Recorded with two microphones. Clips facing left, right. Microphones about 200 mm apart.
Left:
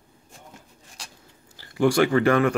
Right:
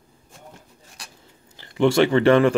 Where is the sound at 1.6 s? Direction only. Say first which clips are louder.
Right 2 dB; 25° right (ahead or behind).